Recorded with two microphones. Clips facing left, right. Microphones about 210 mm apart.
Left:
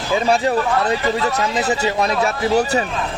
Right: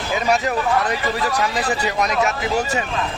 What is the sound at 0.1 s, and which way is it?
Speech, 30° left (ahead or behind).